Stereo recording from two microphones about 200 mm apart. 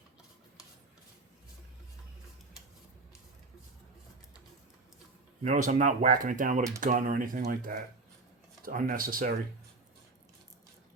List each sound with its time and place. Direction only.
5.4 s speech: 40° right (ahead or behind)